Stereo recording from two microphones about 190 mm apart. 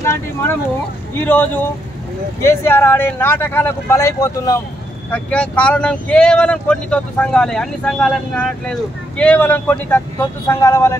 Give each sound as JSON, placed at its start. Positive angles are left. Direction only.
{"t": 1.2, "sound": "speech", "side_deg": 10}